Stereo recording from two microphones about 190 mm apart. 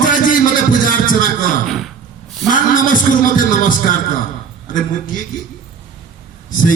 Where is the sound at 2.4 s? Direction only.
45° left (ahead or behind).